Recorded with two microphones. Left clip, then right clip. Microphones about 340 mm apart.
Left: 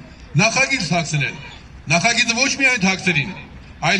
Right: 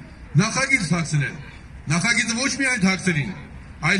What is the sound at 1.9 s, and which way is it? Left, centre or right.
Speech, centre.